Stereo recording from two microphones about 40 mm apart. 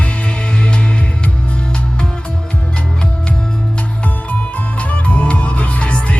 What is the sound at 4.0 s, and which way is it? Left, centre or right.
Music, left.